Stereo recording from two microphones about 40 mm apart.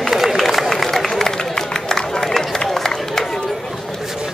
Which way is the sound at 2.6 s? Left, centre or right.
Centre.